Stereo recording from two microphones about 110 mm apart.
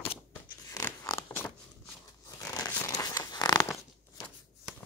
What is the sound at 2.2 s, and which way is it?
Tearing, 30° left (ahead or behind).